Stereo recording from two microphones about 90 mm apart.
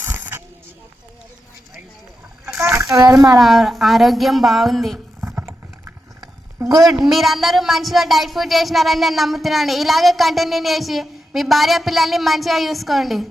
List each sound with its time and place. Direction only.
0.0 s a sound: 25° right (ahead or behind)
2.6 s splash: 35° right (ahead or behind)
2.9 s speech: 40° right (ahead or behind)
3.3 s speech: centre (ahead or behind)
5.2 s vehicle: 25° right (ahead or behind)
6.6 s a sound: 40° right (ahead or behind)
6.8 s speech: centre (ahead or behind)